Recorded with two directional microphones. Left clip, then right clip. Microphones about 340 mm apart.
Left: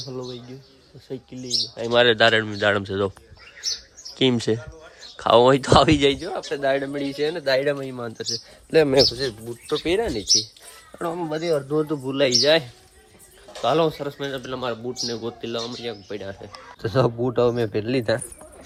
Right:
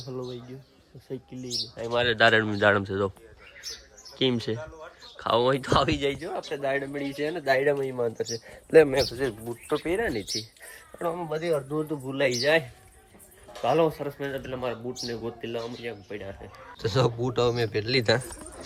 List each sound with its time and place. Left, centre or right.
0.1 s speech: centre
1.8 s speech: left
2.1 s speech: centre
4.2 s speech: centre
11.7 s speech: left
12.1 s speech: centre
13.7 s speech: centre
16.8 s speech: centre